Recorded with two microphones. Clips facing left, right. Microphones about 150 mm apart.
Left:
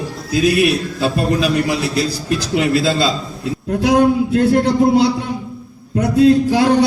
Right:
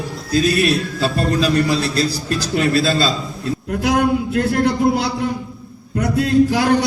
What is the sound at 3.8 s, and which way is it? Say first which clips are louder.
Speech: left 4 dB; 30° left (ahead or behind).